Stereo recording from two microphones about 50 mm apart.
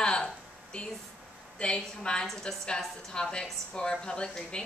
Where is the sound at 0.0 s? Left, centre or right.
Centre.